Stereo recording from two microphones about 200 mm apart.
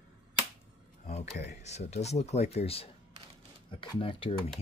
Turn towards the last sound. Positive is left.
turn(degrees=25)  # may be behind; listen again after turning